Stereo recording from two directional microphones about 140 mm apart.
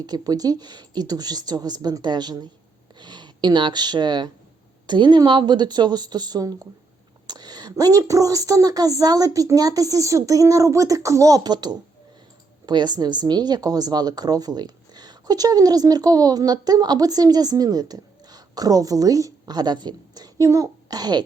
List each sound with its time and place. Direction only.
0.0 s a woman's voice: 30° right (ahead or behind)